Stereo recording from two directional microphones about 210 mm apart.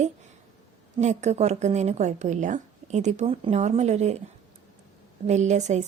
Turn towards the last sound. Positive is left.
turn(degrees=-35)  # may be behind; listen again after turning